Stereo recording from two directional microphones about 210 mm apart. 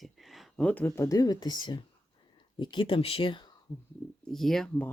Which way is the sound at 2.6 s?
25° left (ahead or behind).